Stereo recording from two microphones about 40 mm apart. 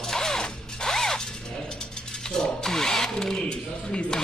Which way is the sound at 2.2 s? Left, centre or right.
Centre.